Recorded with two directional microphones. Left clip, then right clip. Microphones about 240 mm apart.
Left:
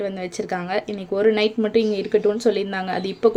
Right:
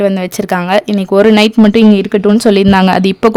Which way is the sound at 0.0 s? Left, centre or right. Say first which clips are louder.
Right 13 dB; right.